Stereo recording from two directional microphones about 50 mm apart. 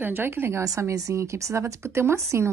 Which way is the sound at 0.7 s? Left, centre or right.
Right.